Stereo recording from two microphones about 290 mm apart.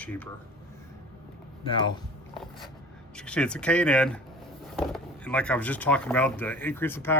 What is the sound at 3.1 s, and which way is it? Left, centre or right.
A man's voice, centre.